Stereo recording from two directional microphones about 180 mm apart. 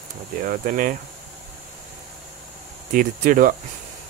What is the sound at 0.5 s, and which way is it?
Speech, 50° right (ahead or behind).